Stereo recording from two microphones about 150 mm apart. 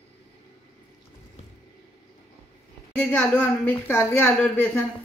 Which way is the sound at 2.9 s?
10° left (ahead or behind).